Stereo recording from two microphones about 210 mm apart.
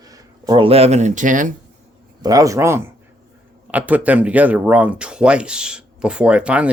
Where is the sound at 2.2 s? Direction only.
15° right (ahead or behind).